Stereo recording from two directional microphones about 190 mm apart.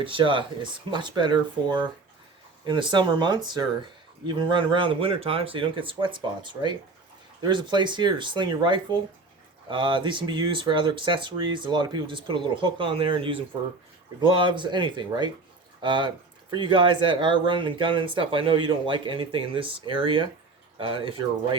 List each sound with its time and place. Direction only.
0.0 s speech: 25° right (ahead or behind)